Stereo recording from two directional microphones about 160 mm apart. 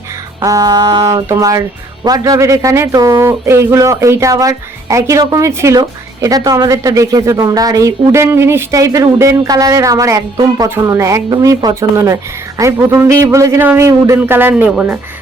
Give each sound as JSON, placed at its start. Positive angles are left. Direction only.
{"t": 0.4, "sound": "a woman's voice", "side_deg": -25}